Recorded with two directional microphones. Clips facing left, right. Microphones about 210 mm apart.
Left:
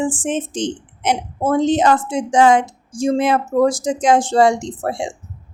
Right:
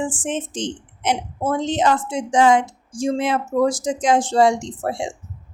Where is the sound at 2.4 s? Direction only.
65° left (ahead or behind).